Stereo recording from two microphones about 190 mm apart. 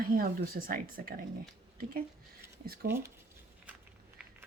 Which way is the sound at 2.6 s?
50° right (ahead or behind).